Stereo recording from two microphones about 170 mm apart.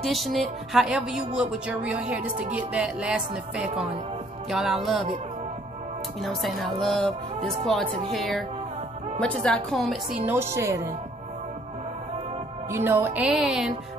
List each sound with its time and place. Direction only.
0.0 s speech: centre (ahead or behind)
6.2 s speech: centre (ahead or behind)
10.2 s a woman's voice: 15° right (ahead or behind)
12.7 s speech: 10° right (ahead or behind)